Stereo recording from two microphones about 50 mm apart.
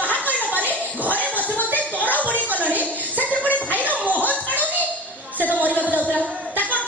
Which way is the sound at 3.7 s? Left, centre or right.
Left.